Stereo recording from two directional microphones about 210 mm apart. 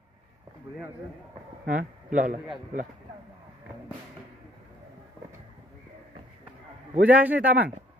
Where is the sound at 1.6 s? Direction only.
40° right (ahead or behind).